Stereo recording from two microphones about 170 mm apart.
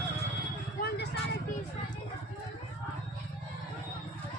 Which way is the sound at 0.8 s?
70° left (ahead or behind).